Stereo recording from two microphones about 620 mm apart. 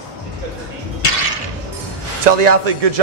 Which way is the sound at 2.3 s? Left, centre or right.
Right.